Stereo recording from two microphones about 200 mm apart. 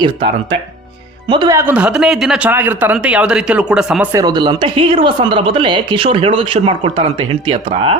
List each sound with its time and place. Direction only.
0.0 s a man's voice: 25° right (ahead or behind); by 4.1 s 5° right (ahead or behind)
4.1 s speech: 20° right (ahead or behind)